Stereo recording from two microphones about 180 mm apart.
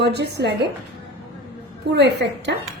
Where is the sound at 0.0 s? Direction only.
70° right (ahead or behind).